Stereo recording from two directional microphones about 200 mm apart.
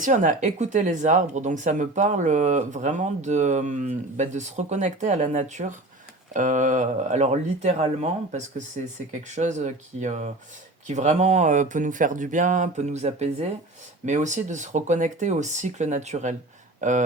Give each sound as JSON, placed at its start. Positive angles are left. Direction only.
{"t": 0.0, "sound": "speech", "side_deg": -40}